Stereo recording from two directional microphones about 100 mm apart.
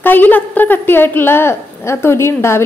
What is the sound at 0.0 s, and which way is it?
A woman's voice, 20° left (ahead or behind).